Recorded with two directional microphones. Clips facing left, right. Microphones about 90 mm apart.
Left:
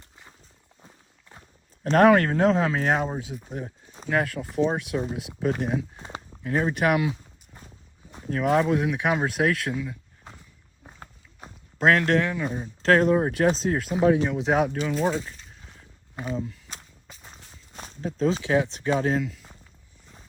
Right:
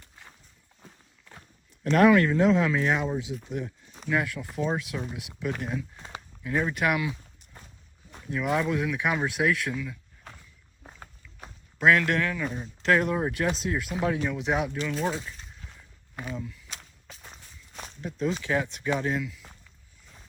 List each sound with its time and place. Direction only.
1.8 s speech: 40° left (ahead or behind)
8.3 s speech: 35° left (ahead or behind)
11.0 s walk: 25° left (ahead or behind)
11.9 s speech: 30° left (ahead or behind)
16.1 s a sound: 30° left (ahead or behind)
17.1 s walk: centre (ahead or behind)
17.7 s walk: 30° left (ahead or behind)
18.4 s speech: 25° left (ahead or behind)